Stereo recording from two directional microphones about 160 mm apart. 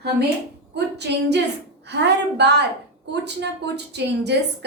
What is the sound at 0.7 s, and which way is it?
A woman's voice, 90° right.